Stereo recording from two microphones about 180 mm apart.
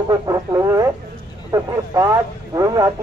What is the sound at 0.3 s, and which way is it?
Speech, 20° right (ahead or behind).